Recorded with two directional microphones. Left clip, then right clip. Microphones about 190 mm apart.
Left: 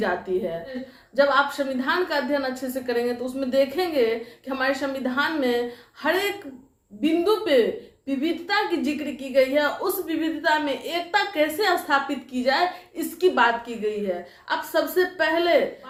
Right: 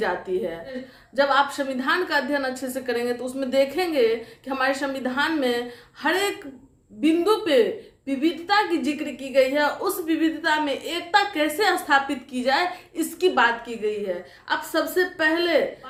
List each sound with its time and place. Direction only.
1.1 s a woman's voice: 25° right (ahead or behind)